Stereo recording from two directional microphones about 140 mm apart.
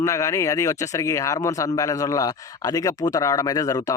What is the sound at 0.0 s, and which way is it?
Speech, 25° left (ahead or behind).